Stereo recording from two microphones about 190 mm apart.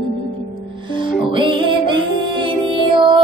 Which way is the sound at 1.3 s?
25° right (ahead or behind).